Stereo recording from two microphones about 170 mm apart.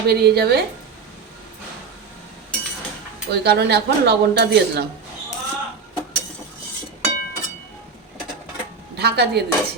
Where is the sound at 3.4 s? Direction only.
75° right (ahead or behind).